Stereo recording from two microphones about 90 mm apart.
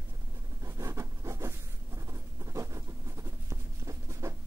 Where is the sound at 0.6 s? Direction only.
35° right (ahead or behind).